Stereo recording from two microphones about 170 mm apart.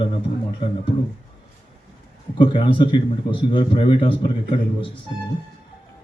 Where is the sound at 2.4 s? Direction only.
30° left (ahead or behind).